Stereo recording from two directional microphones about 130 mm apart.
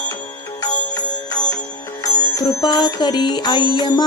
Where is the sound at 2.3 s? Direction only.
35° left (ahead or behind).